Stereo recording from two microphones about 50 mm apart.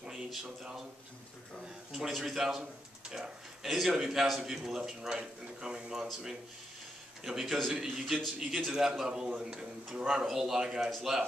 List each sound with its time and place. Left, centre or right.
0.0 s a sound: centre
1.9 s a man's voice: centre
7.2 s a man's voice: centre
10.9 s a man's voice: centre